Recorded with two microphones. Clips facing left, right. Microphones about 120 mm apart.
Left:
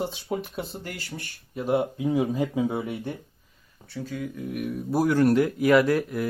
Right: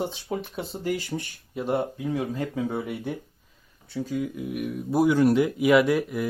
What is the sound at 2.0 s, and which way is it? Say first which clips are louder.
Speech: left 4 dB; 15° left (ahead or behind).